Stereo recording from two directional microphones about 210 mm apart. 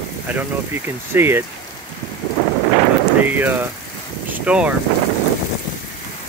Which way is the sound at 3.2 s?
10° right (ahead or behind).